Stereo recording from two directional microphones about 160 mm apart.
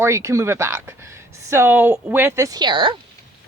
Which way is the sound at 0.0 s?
20° right (ahead or behind).